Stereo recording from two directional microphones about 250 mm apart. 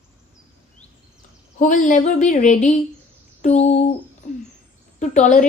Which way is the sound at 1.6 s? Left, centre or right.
Left.